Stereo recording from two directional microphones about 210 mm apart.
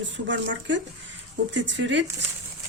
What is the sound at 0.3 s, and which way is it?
Speech, 60° right (ahead or behind).